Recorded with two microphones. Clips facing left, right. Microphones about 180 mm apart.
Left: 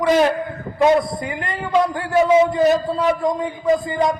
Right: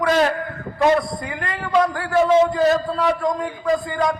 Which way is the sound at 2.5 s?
20° left (ahead or behind).